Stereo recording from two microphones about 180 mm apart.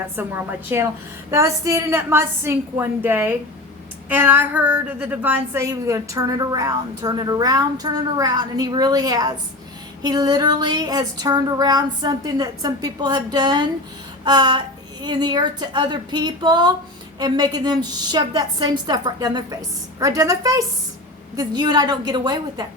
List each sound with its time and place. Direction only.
0.2 s a woman's voice: 10° right (ahead or behind)